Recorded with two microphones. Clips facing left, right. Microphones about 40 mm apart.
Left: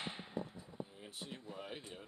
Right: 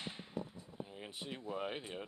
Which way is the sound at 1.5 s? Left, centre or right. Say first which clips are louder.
Right 9 dB; right.